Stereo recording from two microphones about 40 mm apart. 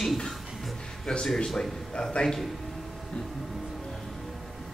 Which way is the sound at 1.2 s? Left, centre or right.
Centre.